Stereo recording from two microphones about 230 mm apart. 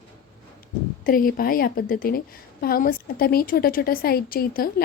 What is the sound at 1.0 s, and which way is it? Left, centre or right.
A woman's voice, left.